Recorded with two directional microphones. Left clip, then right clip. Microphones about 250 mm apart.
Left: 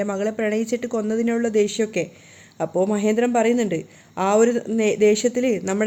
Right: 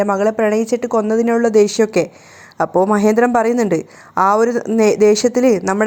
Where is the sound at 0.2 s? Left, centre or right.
Centre.